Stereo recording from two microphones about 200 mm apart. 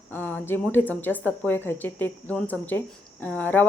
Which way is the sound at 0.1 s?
10° left (ahead or behind).